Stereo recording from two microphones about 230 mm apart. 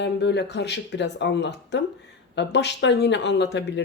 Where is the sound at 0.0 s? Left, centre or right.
Left.